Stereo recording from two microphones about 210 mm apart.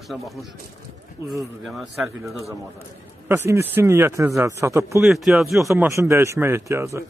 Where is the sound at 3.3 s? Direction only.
10° right (ahead or behind).